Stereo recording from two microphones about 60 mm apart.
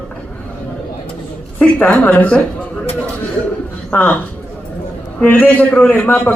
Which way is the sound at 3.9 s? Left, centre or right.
Left.